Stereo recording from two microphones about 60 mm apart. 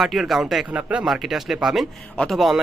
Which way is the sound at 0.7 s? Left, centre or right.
Right.